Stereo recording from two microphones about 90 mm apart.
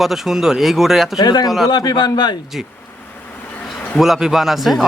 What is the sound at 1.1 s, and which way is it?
A man's voice, 50° left (ahead or behind).